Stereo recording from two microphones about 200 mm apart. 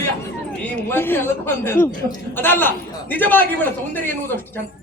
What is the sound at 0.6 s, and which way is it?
A man's voice, 10° left (ahead or behind).